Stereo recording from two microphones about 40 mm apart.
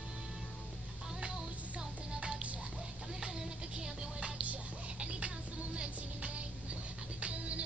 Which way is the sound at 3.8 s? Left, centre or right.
Right.